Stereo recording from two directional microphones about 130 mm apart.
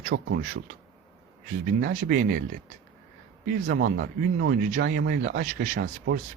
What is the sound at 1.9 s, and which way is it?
Speech, 85° right.